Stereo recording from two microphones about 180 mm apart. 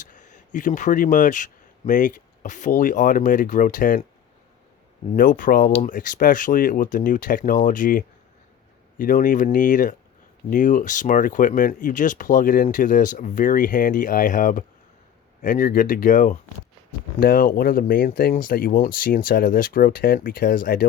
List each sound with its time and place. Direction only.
0.0 s speech: 45° left (ahead or behind)
5.1 s speech: 50° left (ahead or behind)